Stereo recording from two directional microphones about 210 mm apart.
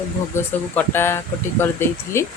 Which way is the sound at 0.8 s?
10° left (ahead or behind).